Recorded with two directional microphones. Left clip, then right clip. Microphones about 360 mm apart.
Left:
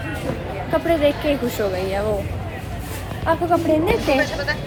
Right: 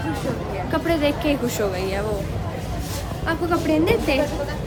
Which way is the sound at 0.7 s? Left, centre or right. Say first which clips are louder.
Left 4 dB; centre.